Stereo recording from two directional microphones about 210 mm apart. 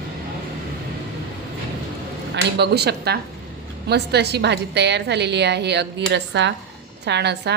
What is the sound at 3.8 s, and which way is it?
A woman's voice, 50° right (ahead or behind).